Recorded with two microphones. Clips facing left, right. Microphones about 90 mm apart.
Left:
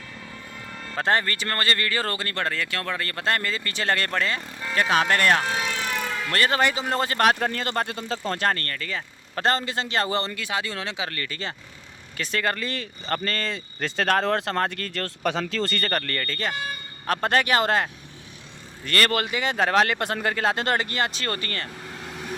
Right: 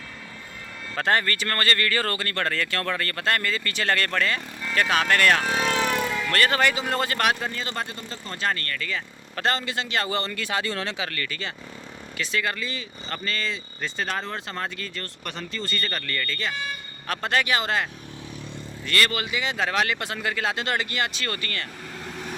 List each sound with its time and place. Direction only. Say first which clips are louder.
0.9 s speech: even; 25° left (ahead or behind)
7.3 s speech: left 4 dB; 55° left (ahead or behind)
7.9 s speech: left 7 dB; 90° left
8.4 s speech: right 1 dB; 40° left (ahead or behind)
10.3 s speech: right 1 dB; 10° left (ahead or behind)
10.9 s speech: even; 25° left (ahead or behind); by 13.6 s 50° left (ahead or behind)
13.8 s speech: left 7 dB; 80° left; by 15.0 s 60° left (ahead or behind)
15.4 s speech: left 4 dB; 85° left; by 17.8 s 45° left (ahead or behind)
18.9 s speech: left 2 dB; 45° left (ahead or behind)